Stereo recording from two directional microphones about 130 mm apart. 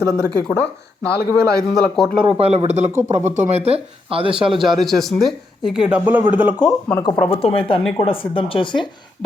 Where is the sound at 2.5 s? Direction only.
55° right (ahead or behind).